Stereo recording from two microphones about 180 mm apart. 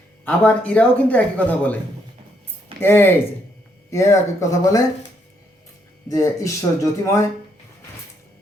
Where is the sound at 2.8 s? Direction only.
10° left (ahead or behind).